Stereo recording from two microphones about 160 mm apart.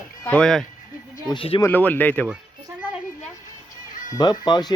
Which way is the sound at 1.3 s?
30° left (ahead or behind).